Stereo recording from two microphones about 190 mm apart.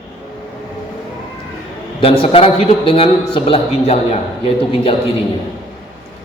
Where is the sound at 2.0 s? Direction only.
30° left (ahead or behind).